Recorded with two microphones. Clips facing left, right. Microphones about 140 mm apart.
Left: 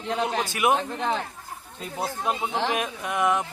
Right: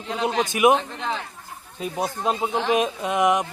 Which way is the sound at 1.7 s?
20° right (ahead or behind).